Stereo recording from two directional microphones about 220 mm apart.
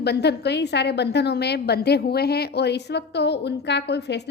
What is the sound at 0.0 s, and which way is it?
A woman's voice, 50° left (ahead or behind).